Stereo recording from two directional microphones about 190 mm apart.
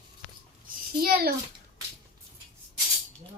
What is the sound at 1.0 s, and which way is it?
Speech, 55° right (ahead or behind).